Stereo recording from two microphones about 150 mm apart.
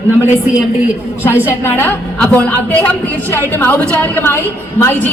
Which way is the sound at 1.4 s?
15° left (ahead or behind).